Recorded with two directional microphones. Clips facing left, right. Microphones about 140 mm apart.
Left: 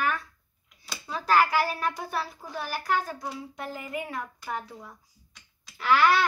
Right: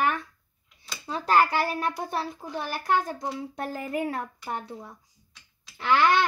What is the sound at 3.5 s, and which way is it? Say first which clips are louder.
Speech: right 4 dB; 40° right (ahead or behind).